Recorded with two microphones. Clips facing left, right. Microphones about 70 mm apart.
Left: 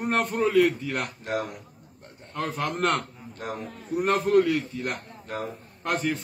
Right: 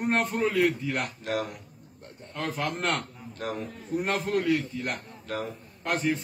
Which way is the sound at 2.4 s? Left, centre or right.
Centre.